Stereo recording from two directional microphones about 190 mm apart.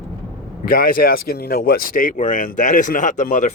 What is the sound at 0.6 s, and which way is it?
Speech, 50° left (ahead or behind).